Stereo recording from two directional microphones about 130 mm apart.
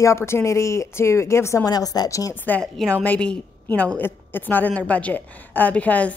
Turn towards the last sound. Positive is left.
turn(degrees=10)  # may be behind; listen again after turning